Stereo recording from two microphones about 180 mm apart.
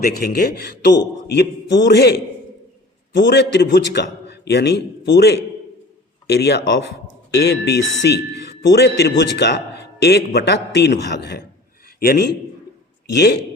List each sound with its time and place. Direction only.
0.0 s a man's voice: 60° left (ahead or behind)